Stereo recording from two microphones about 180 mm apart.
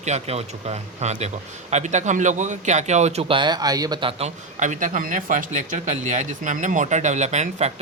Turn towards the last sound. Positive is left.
turn(degrees=-35)  # may be behind; listen again after turning